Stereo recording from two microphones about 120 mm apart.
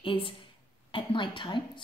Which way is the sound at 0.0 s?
45° left (ahead or behind).